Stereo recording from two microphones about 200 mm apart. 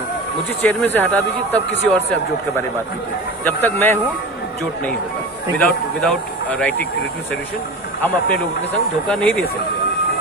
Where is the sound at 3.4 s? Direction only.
10° left (ahead or behind).